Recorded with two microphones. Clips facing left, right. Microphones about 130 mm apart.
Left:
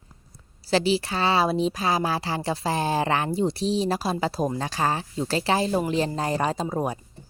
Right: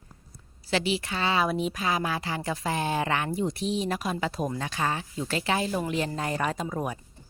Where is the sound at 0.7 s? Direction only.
35° left (ahead or behind).